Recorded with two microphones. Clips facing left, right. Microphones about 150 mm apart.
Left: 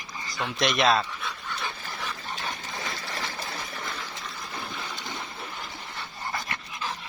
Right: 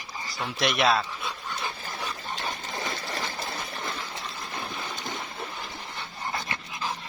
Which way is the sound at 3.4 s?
25° right (ahead or behind).